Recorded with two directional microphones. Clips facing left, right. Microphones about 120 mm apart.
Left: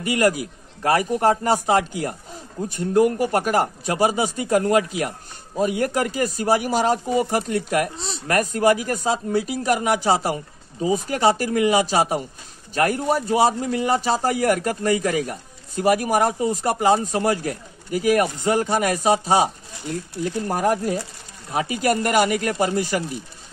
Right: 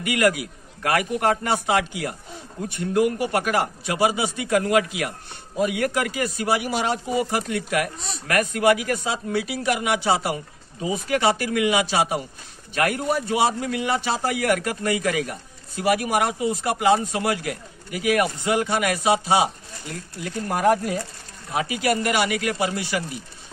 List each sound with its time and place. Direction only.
0.0 s a man's voice: 35° left (ahead or behind)